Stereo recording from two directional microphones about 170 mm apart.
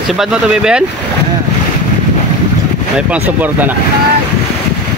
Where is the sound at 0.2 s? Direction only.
5° right (ahead or behind).